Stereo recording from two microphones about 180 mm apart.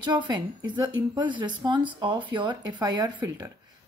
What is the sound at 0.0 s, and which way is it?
A woman's voice, 25° right (ahead or behind).